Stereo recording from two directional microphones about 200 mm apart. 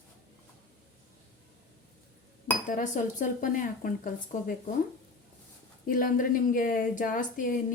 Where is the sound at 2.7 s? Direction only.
40° left (ahead or behind).